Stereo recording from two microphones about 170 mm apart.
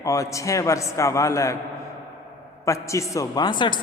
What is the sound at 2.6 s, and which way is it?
Speech, 20° left (ahead or behind).